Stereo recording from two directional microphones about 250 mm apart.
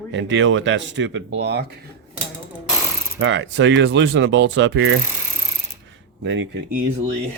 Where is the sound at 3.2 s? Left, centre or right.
Right.